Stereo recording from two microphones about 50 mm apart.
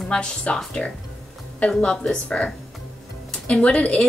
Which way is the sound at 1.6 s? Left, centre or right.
Left.